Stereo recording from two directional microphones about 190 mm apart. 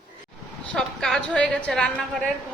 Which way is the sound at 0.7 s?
Centre (ahead or behind).